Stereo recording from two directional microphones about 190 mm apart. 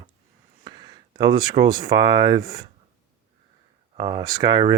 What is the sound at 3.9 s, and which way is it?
Speech, 20° right (ahead or behind).